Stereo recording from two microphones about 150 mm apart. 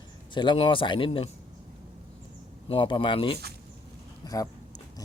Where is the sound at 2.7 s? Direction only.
35° left (ahead or behind).